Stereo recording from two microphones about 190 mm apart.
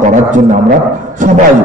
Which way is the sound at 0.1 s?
40° right (ahead or behind).